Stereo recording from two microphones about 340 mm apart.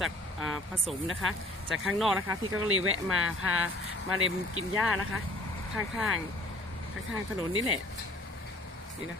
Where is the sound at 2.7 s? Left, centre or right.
Right.